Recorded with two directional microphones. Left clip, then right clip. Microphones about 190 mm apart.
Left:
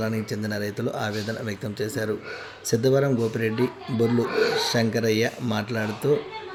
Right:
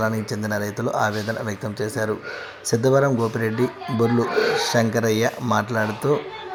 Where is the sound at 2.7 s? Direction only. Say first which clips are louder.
Right 3 dB; 5° left (ahead or behind).